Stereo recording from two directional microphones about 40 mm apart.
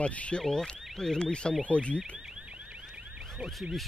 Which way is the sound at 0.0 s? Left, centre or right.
Left.